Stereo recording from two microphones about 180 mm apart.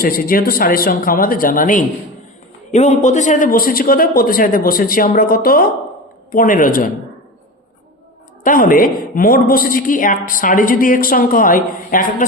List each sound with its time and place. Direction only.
0.0 s a woman's voice: 55° left (ahead or behind)
8.4 s a woman's voice: 50° left (ahead or behind)